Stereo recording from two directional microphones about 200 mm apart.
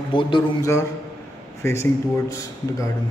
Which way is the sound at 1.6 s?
15° left (ahead or behind).